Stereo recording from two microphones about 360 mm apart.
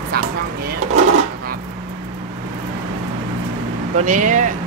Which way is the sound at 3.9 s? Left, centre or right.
Right.